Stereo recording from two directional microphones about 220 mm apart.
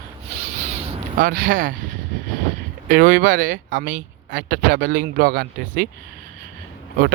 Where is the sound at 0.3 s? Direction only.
30° right (ahead or behind).